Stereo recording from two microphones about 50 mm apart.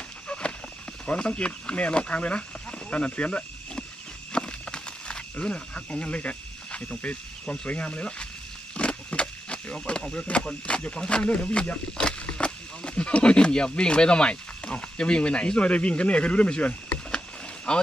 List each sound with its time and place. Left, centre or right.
0.3 s walk: centre
1.0 s speech: left
4.3 s wild animals: centre
7.6 s speech: left
8.7 s a sound: left
9.8 s speech: centre